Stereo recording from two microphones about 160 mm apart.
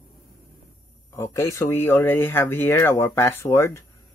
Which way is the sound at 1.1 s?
15° left (ahead or behind).